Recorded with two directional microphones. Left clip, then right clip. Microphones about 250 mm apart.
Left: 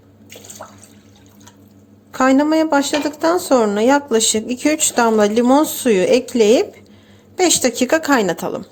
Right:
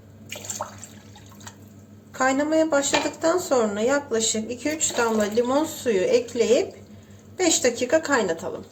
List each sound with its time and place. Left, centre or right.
2.1 s speech: left